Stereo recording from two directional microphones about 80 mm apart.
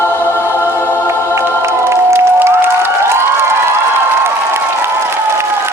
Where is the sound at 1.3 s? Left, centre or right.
Right.